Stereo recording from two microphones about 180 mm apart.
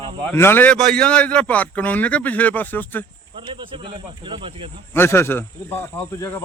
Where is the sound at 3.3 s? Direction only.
30° right (ahead or behind).